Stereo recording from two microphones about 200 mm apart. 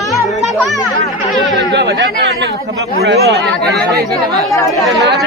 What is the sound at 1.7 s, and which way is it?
Speech, 60° right (ahead or behind).